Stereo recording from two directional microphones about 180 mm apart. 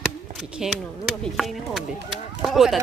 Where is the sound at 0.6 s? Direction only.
Centre (ahead or behind).